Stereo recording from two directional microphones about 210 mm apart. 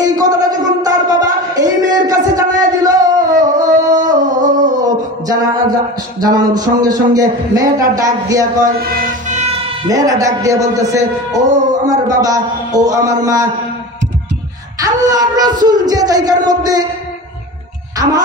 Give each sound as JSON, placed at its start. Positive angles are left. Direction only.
{"t": 0.0, "sound": "a sound", "side_deg": -20}
{"t": 4.5, "sound": "music", "side_deg": -35}
{"t": 4.7, "sound": "music", "side_deg": -20}
{"t": 6.2, "sound": "a man's voice", "side_deg": -20}
{"t": 9.8, "sound": "a man's voice", "side_deg": -15}
{"t": 14.8, "sound": "speech", "side_deg": -20}